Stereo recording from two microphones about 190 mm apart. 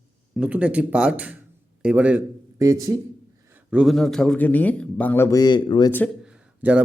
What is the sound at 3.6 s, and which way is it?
Speech, 5° right (ahead or behind).